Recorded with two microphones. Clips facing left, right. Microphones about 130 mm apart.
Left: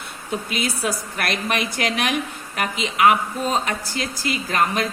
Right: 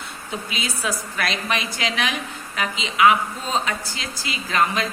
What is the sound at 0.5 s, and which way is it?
A woman's voice, 55° left (ahead or behind).